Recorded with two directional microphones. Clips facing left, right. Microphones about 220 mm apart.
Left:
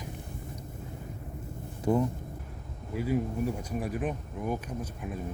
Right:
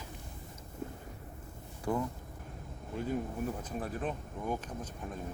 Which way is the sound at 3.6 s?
10° left (ahead or behind).